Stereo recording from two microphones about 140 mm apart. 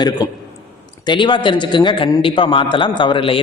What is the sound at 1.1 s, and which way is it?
Speech, 35° left (ahead or behind).